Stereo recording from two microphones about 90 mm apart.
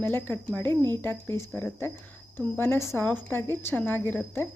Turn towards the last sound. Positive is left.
turn(degrees=20)  # may be behind; listen again after turning